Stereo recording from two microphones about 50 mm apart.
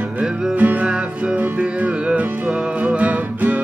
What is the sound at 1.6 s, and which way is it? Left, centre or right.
Music, right.